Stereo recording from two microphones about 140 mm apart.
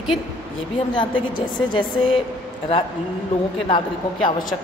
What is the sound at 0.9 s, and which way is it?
A woman's voice, 35° left (ahead or behind).